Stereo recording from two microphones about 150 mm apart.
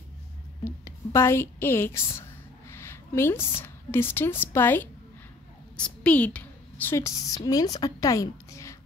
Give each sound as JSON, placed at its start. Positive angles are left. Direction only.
{"t": 0.7, "sound": "a woman's voice", "side_deg": 20}